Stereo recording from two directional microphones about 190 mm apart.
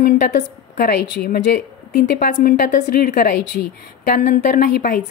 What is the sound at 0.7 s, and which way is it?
A woman's voice, 60° left (ahead or behind).